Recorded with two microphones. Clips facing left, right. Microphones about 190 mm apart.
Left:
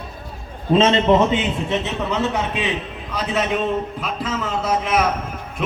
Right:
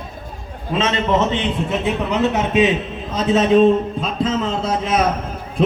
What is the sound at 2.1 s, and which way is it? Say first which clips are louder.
A man's voice: right 6 dB; 20° right (ahead or behind).